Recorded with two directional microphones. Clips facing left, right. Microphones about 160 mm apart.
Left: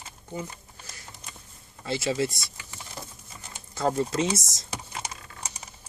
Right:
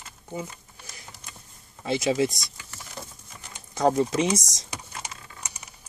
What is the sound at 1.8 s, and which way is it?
Speech, 20° right (ahead or behind).